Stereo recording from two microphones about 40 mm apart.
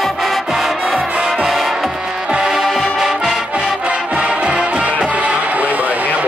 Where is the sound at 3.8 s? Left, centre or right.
Right.